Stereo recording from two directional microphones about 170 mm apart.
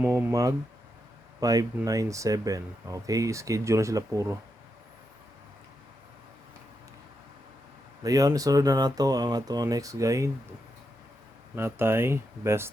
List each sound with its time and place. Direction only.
0.0 s a sound: 15° right (ahead or behind)
1.4 s speech: 20° right (ahead or behind)
8.0 s speech: 20° right (ahead or behind)
11.5 s speech: 15° right (ahead or behind)